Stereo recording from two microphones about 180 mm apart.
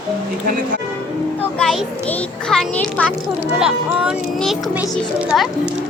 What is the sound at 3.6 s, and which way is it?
A child's voice, 5° right (ahead or behind).